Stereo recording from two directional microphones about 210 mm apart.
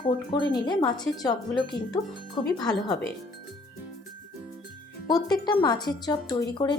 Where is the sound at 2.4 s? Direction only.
15° left (ahead or behind).